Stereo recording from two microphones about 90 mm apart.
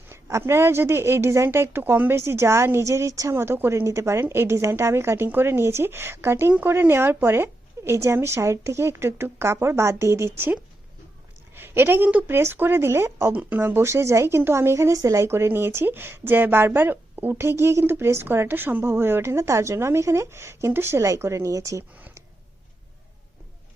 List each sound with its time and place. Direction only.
0.1 s a woman's voice: 30° right (ahead or behind)